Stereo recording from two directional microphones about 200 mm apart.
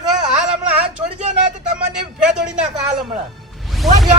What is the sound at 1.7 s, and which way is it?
Speech, 5° right (ahead or behind).